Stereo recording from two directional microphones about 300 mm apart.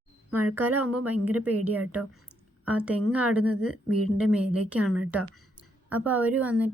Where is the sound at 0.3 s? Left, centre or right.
Right.